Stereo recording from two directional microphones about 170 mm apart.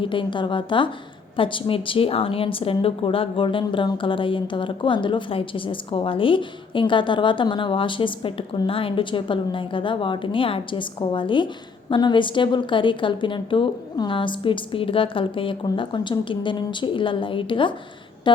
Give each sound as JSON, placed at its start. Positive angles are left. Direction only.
{"t": 0.0, "sound": "a woman's voice", "side_deg": 30}